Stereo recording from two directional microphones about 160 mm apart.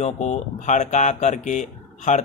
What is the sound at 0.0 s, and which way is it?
Speech, 45° left (ahead or behind).